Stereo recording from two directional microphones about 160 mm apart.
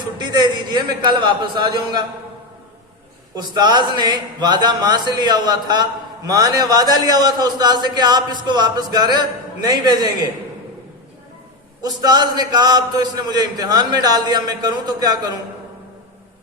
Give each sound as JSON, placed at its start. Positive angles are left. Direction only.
{"t": 0.2, "sound": "a sound", "side_deg": -30}
{"t": 1.2, "sound": "speech", "side_deg": -30}
{"t": 3.5, "sound": "speech", "side_deg": -25}
{"t": 11.8, "sound": "speech", "side_deg": -25}